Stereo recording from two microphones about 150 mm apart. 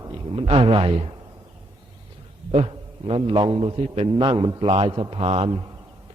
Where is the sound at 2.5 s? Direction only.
40° right (ahead or behind).